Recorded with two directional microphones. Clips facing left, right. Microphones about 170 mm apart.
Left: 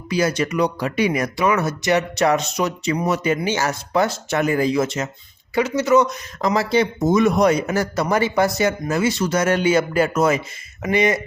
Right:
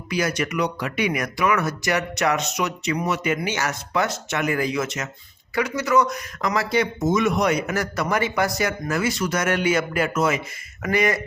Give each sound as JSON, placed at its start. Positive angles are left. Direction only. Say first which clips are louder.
{"t": 0.1, "sound": "speech", "louder": "left 4 dB", "side_deg": 30}
{"t": 10.8, "sound": "speech", "louder": "left 3 dB", "side_deg": 20}